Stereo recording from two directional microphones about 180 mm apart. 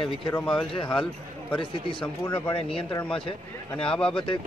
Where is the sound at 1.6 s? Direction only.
30° left (ahead or behind).